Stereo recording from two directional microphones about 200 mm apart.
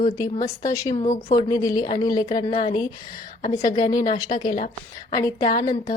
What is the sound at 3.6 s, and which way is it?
Speech, 20° left (ahead or behind).